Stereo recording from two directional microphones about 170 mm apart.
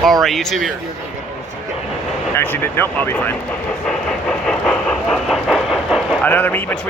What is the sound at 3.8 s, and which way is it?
Train, 5° left (ahead or behind).